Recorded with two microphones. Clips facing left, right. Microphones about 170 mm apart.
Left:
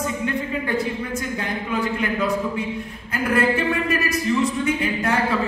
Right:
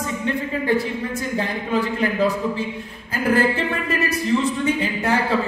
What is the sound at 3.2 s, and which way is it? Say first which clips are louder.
Speech: right 1 dB; 30° right (ahead or behind).